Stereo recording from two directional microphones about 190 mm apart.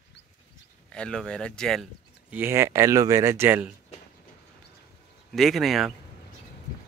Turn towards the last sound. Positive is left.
turn(degrees=0)  # may be behind; listen again after turning